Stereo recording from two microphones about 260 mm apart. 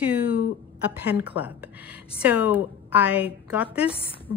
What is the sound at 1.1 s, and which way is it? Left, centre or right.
Speech, centre.